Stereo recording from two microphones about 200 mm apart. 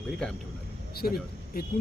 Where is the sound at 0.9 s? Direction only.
50° left (ahead or behind).